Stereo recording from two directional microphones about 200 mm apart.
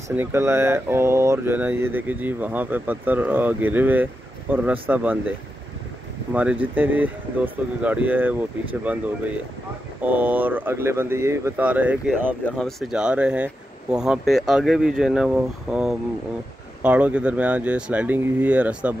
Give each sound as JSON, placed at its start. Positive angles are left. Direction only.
{"t": 0.1, "sound": "speech", "side_deg": -10}
{"t": 6.3, "sound": "speech", "side_deg": -5}